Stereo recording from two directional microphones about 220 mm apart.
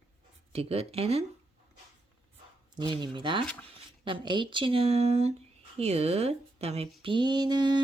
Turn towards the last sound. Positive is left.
turn(degrees=-20)  # may be behind; listen again after turning